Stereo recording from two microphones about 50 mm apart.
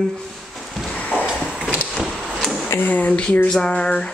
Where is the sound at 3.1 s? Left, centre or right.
Left.